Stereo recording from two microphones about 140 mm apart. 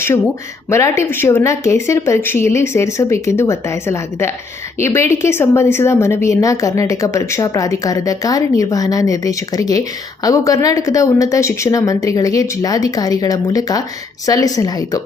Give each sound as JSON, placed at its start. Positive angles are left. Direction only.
{"t": 0.7, "sound": "a woman's voice", "side_deg": 20}